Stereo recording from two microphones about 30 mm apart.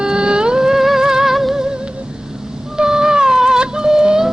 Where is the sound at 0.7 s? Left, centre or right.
Centre.